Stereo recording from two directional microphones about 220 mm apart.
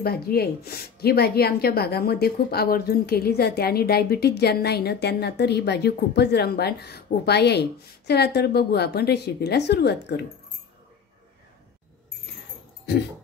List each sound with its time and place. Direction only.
0.0 s a woman's voice: 45° left (ahead or behind)